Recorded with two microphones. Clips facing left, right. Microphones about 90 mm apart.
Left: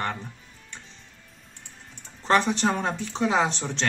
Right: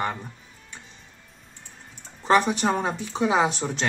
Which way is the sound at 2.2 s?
5° right (ahead or behind).